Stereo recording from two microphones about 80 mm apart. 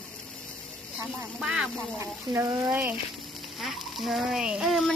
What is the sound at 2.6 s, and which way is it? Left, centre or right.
Frying, right.